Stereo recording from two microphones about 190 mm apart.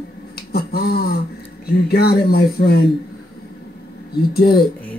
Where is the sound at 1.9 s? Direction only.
55° left (ahead or behind).